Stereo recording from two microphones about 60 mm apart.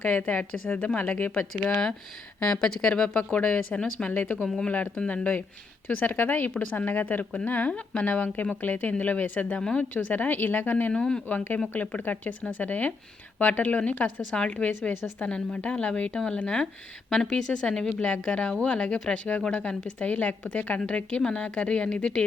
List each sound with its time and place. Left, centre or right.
0.0 s a woman's voice: left
1.7 s a woman's voice: centre; by 4.4 s left
4.4 s a woman's voice: centre
4.9 s a woman's voice: left
9.6 s a woman's voice: centre
9.9 s speech: left
10.9 s a woman's voice: centre
11.3 s a woman's voice: left; by 17.8 s centre
17.8 s a woman's voice: left